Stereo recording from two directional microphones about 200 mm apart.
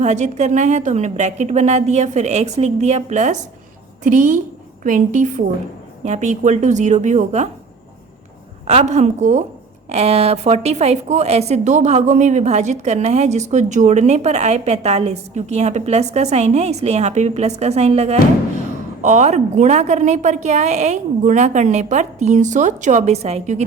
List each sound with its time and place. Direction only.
0.0 s a woman's voice: 35° right (ahead or behind)
8.6 s a woman's voice: 35° right (ahead or behind)